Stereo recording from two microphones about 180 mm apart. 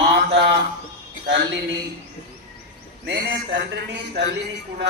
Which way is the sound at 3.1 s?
70° right (ahead or behind).